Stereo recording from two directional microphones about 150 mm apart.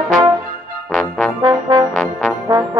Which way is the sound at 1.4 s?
30° right (ahead or behind).